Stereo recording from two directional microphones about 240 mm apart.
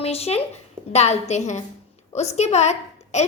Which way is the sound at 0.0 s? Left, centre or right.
Left.